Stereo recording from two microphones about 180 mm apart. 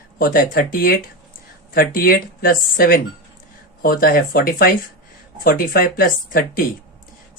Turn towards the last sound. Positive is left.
turn(degrees=50)  # may be behind; listen again after turning